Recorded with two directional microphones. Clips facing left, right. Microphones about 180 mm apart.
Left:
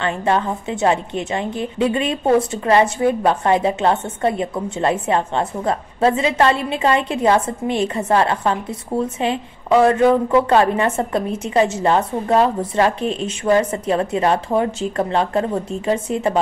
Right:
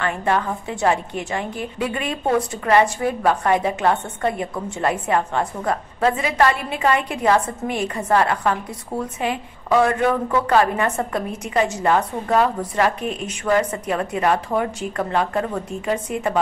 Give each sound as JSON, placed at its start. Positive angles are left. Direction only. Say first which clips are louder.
{"t": 0.0, "sound": "a woman's voice", "louder": "left 2 dB", "side_deg": 25}